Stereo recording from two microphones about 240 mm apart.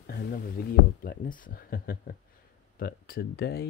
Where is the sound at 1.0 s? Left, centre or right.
Left.